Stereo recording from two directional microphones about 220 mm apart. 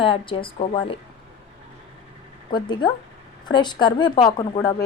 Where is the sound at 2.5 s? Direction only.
20° left (ahead or behind).